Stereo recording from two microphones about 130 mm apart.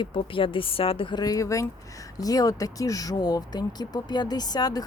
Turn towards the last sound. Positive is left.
turn(degrees=30)  # may be behind; listen again after turning